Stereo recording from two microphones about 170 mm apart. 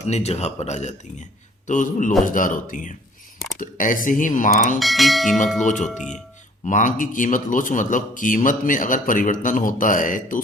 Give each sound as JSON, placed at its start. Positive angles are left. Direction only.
{"t": 0.1, "sound": "a man's voice", "side_deg": 40}
{"t": 4.8, "sound": "speech", "side_deg": 0}
{"t": 5.6, "sound": "a man's voice", "side_deg": 45}